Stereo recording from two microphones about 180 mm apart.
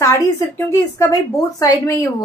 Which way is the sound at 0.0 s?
15° left (ahead or behind).